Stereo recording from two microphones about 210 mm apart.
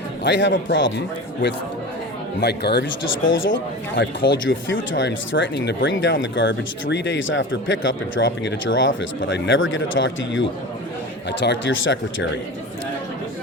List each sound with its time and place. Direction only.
0.3 s speech: 60° left (ahead or behind)
2.4 s speech: 50° left (ahead or behind)
3.2 s speech: 65° left (ahead or behind)
11.4 s speech: 60° left (ahead or behind)